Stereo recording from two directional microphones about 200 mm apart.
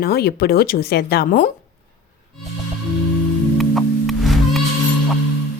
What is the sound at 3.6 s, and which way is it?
Music, centre (ahead or behind).